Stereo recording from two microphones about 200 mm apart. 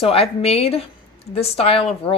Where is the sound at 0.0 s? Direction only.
30° left (ahead or behind).